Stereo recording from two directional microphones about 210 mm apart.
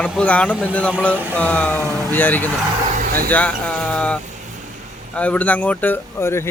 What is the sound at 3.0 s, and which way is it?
Vehicle, 45° right (ahead or behind).